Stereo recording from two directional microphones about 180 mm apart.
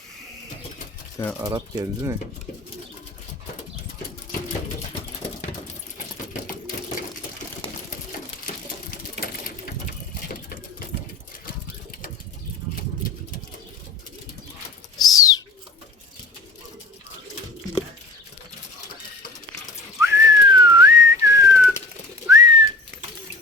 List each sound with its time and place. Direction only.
1.5 s speech: 20° right (ahead or behind)
14.9 s bird: 20° left (ahead or behind)
20.0 s whistling: 15° right (ahead or behind)